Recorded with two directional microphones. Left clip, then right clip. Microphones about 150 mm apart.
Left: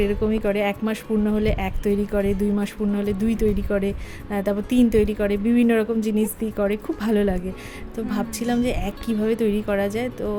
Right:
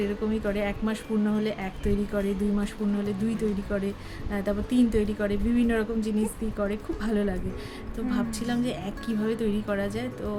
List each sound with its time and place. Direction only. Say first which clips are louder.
0.0 s a woman's voice: left 7 dB; 45° left (ahead or behind)